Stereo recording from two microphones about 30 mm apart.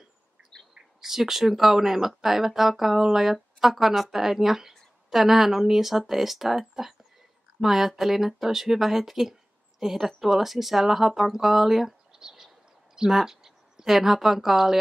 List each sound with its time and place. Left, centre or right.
1.0 s a woman's voice: centre
12.2 s a sound: right
13.1 s speech: centre